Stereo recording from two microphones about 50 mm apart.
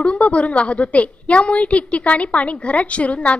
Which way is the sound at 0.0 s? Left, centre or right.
Left.